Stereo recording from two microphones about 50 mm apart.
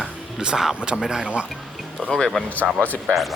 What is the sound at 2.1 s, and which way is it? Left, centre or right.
Speech, centre.